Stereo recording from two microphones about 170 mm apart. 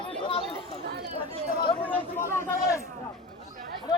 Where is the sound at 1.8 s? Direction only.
10° left (ahead or behind).